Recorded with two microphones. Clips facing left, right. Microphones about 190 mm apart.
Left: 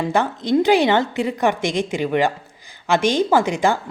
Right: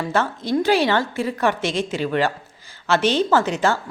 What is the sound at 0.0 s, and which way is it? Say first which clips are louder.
Speech: left 2 dB; 15° left (ahead or behind).